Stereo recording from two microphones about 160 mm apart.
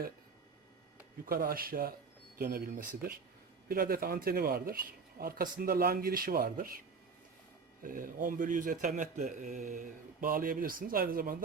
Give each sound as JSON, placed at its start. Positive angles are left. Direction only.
{"t": 1.2, "sound": "a man's voice", "side_deg": -65}